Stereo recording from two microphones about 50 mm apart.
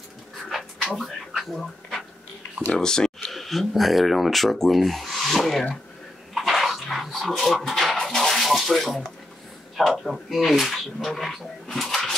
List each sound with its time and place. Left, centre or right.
0.8 s a sound: centre
2.8 s a sound: centre
3.3 s speech: centre
6.3 s dog: centre
7.5 s bathtub: centre
9.8 s speech: centre